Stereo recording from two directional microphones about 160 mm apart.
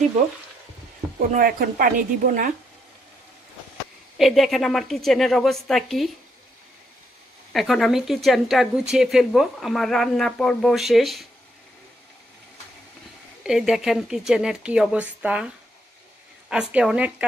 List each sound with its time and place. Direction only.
1.3 s speech: 60° right (ahead or behind)
4.2 s speech: centre (ahead or behind)
7.5 s speech: centre (ahead or behind)
13.4 s a woman's voice: 5° right (ahead or behind)